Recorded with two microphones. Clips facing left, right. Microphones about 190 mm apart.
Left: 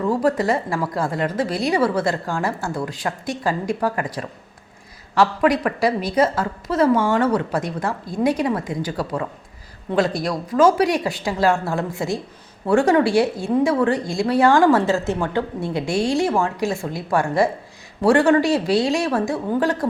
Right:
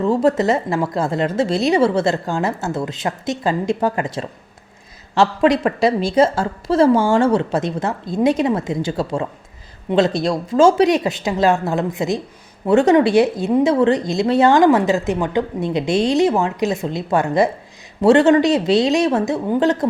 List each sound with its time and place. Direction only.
0.0 s a woman's voice: 25° right (ahead or behind)